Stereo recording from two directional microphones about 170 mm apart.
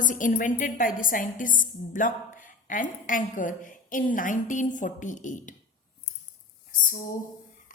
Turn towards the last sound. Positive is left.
turn(degrees=50)  # may be behind; listen again after turning